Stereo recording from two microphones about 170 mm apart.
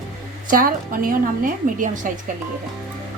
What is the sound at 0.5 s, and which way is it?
Speech, 55° right (ahead or behind).